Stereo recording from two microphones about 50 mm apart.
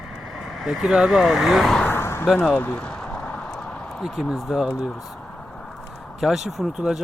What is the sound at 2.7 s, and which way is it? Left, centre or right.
Speech, left.